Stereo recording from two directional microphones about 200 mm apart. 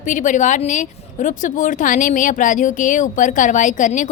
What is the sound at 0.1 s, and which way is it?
A woman's voice, 40° left (ahead or behind).